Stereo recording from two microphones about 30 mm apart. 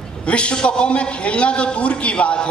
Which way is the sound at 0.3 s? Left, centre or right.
Left.